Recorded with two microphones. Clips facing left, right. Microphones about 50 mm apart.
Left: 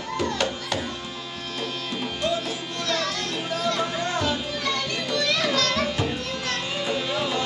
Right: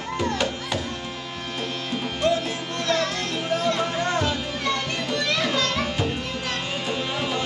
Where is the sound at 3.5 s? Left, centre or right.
Right.